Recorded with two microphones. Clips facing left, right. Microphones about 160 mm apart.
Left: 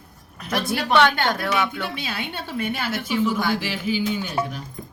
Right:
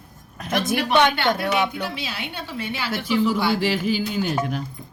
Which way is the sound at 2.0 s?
50° left (ahead or behind).